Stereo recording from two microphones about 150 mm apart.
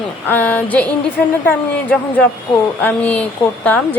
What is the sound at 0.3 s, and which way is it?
A woman's voice, 10° left (ahead or behind).